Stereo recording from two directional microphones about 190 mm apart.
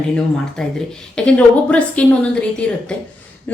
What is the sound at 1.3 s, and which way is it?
Speech, 5° left (ahead or behind).